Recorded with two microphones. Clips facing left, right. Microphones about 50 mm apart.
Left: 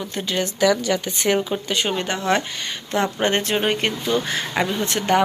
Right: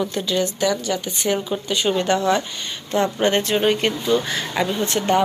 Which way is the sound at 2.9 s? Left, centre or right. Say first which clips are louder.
Right 2 dB; left.